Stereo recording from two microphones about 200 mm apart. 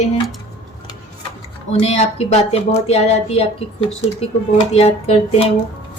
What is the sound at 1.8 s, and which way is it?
A woman's voice, 30° left (ahead or behind).